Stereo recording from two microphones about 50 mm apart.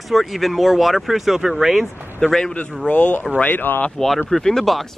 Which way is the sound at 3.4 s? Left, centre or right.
Left.